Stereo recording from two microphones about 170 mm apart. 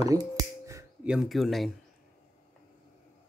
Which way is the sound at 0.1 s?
20° right (ahead or behind).